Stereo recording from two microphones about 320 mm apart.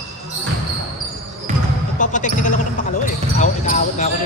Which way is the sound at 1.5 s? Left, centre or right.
Right.